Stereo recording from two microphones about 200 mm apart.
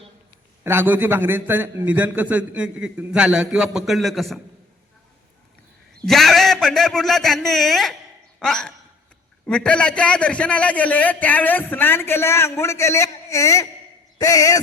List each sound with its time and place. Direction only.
0.6 s a man's voice: 10° right (ahead or behind)
6.1 s a man's voice: centre (ahead or behind); by 14.6 s 15° left (ahead or behind)